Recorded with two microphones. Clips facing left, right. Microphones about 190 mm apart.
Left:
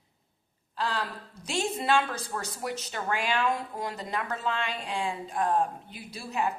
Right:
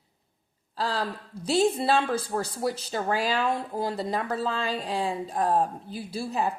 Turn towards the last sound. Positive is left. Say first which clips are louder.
# right 3 dB
turn(degrees=-35)  # may be behind; listen again after turning